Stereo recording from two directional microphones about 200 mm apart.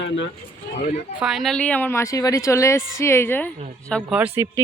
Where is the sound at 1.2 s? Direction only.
Centre (ahead or behind).